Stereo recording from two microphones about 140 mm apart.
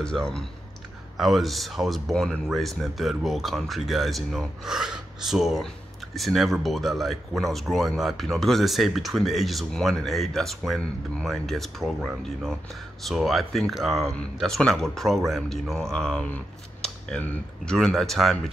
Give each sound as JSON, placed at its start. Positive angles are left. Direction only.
{"t": 0.0, "sound": "speech", "side_deg": 5}